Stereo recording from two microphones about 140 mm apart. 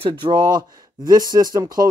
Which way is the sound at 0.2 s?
30° right (ahead or behind).